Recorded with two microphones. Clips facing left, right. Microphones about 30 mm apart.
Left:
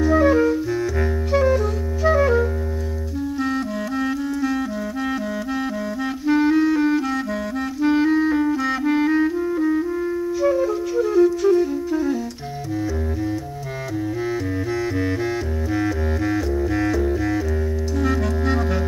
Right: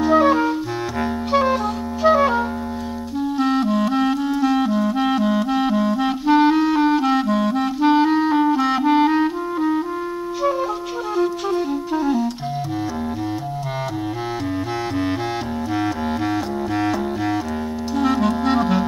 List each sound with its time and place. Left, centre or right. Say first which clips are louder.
0.0 s clarinet: right 1 dB; right
1.3 s music: even; right
3.3 s clarinet: right 7 dB; right
10.4 s flute: left 1 dB; right
15.7 s music: even; right
17.9 s clarinet: right 5 dB; right